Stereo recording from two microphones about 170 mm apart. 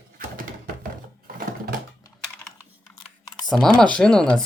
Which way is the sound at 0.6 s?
60° right (ahead or behind).